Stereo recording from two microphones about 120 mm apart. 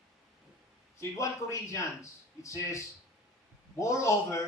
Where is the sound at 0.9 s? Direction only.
25° left (ahead or behind).